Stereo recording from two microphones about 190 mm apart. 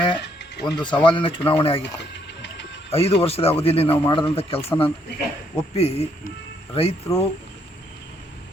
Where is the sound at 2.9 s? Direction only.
30° left (ahead or behind).